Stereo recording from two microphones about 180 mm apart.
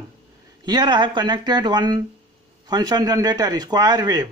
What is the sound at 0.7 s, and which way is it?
A man's voice, 25° right (ahead or behind).